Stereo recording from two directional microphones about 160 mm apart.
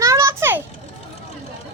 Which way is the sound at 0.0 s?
20° right (ahead or behind).